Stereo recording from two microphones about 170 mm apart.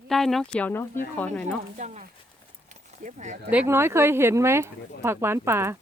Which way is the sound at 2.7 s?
45° right (ahead or behind).